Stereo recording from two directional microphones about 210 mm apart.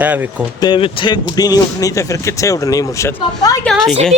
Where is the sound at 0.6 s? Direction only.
25° left (ahead or behind).